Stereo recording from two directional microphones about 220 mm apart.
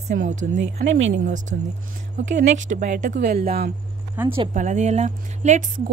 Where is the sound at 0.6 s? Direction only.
55° right (ahead or behind).